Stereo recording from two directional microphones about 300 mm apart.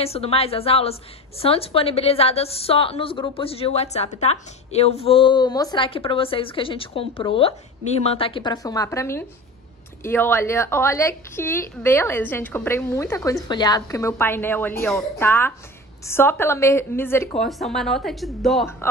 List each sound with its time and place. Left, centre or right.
0.0 s a woman's voice: centre